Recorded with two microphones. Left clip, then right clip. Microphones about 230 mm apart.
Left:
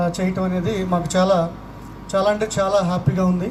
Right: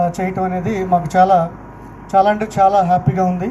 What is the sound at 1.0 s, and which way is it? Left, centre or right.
Speech, left.